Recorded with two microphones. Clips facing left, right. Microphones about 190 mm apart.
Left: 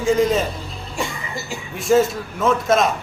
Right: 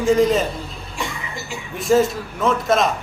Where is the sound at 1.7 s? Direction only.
Centre (ahead or behind).